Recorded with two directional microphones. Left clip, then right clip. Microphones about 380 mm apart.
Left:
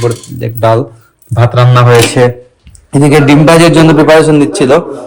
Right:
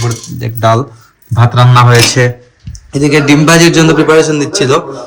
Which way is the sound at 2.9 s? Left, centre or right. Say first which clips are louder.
Left 2 dB; centre.